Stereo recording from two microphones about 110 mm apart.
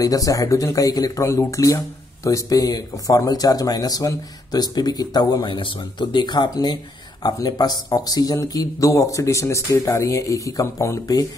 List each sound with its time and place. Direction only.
0.0 s speech: 30° left (ahead or behind)